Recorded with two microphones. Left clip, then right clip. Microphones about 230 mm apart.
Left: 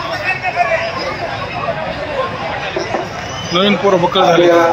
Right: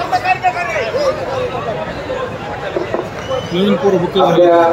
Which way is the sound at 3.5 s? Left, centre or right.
Centre.